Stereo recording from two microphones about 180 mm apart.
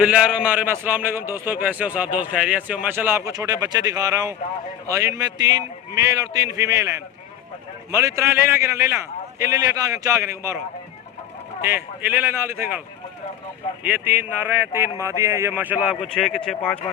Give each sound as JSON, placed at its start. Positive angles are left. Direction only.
{"t": 0.0, "sound": "a man's voice", "side_deg": -5}
{"t": 11.6, "sound": "a man's voice", "side_deg": -10}
{"t": 13.8, "sound": "a man's voice", "side_deg": -10}